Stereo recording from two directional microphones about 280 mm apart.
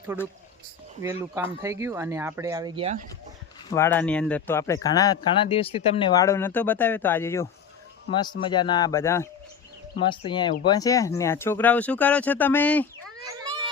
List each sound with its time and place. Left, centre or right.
1.2 s speech: centre
3.7 s speech: centre